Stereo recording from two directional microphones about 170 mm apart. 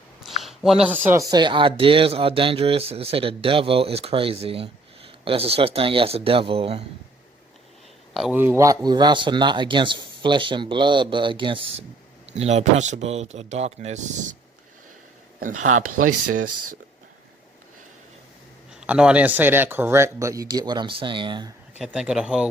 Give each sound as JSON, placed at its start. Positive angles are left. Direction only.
{"t": 0.4, "sound": "speech", "side_deg": 0}
{"t": 8.1, "sound": "speech", "side_deg": 0}
{"t": 8.4, "sound": "a man's voice", "side_deg": -15}
{"t": 15.4, "sound": "speech", "side_deg": -50}
{"t": 18.7, "sound": "speech", "side_deg": -5}
{"t": 21.8, "sound": "speech", "side_deg": -5}